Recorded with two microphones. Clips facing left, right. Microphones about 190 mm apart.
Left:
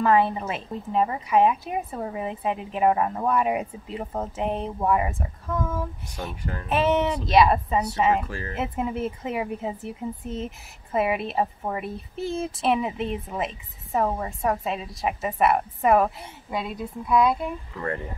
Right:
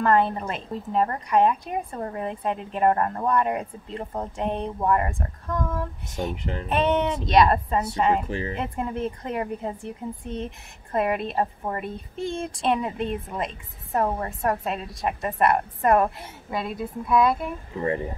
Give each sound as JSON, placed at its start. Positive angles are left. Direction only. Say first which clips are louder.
{"t": 0.0, "sound": "speech", "louder": "even", "side_deg": 5}
{"t": 6.3, "sound": "speech", "louder": "right 3 dB", "side_deg": -20}
{"t": 6.7, "sound": "speech", "louder": "left 1 dB", "side_deg": 5}
{"t": 8.3, "sound": "speech", "louder": "right 5 dB", "side_deg": -20}
{"t": 8.5, "sound": "speech", "louder": "left 1 dB", "side_deg": 5}
{"t": 17.7, "sound": "speech", "louder": "right 6 dB", "side_deg": -20}